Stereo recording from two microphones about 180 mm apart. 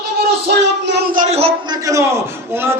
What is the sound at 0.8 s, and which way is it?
Speech, 70° right (ahead or behind).